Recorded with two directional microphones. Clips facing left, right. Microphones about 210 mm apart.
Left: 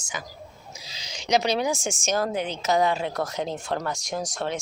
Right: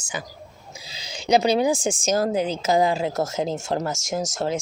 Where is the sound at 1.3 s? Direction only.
30° right (ahead or behind).